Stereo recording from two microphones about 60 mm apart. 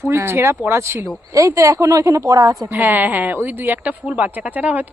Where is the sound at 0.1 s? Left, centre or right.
Right.